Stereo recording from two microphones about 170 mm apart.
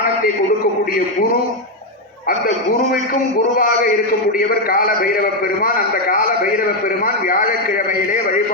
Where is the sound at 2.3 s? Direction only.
60° left (ahead or behind).